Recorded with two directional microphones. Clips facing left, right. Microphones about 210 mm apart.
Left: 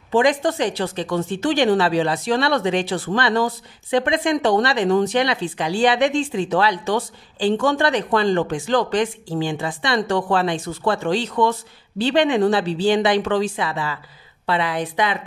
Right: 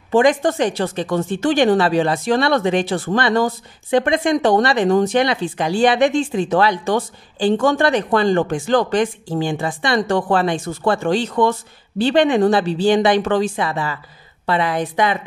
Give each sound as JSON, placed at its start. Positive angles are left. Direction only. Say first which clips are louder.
{"t": 0.1, "sound": "a woman's voice", "louder": "right 3 dB", "side_deg": -50}